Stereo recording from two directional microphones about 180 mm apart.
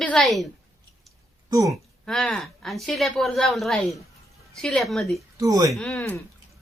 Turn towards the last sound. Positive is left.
turn(degrees=5)  # may be behind; listen again after turning